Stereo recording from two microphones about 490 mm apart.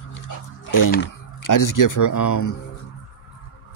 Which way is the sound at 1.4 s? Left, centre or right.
Left.